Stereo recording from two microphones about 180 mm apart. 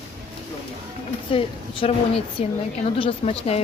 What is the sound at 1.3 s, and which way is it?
A woman's voice, 30° left (ahead or behind).